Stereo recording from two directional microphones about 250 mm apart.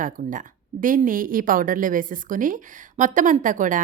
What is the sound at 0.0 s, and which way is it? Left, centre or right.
A woman's voice, right.